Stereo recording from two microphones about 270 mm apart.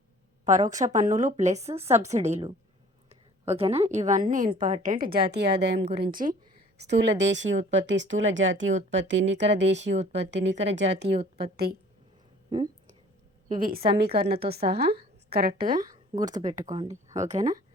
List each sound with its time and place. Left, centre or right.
0.4 s a woman's voice: right
9.9 s speech: right
10.2 s a woman's voice: right
12.5 s a sound: centre
13.6 s a woman's voice: right
15.7 s speech: centre
16.2 s speech: right
16.6 s speech: centre